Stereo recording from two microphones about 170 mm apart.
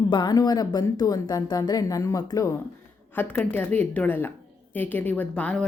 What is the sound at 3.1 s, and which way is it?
Speech, 10° left (ahead or behind).